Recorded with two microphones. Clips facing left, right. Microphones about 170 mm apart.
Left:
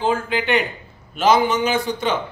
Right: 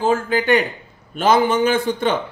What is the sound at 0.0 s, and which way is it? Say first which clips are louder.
A man's voice: right 3 dB; 45° right (ahead or behind).